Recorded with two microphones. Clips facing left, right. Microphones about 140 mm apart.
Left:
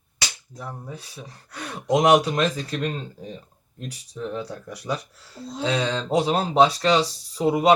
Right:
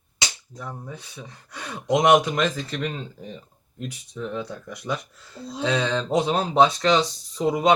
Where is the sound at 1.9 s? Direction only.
10° left (ahead or behind).